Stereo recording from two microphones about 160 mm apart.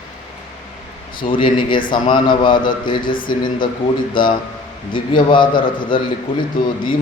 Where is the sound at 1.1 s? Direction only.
30° left (ahead or behind).